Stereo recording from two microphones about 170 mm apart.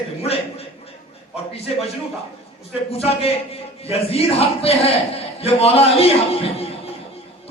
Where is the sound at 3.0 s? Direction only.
35° left (ahead or behind).